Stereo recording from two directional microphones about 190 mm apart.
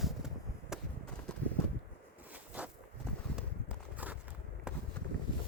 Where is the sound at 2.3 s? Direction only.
10° right (ahead or behind).